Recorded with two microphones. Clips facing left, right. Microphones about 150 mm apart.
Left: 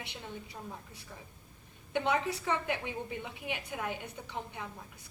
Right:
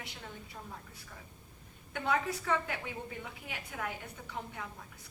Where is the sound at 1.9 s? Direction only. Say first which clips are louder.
Left 2 dB; 20° left (ahead or behind).